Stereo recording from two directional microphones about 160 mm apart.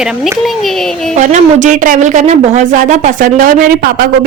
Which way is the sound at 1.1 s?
50° right (ahead or behind).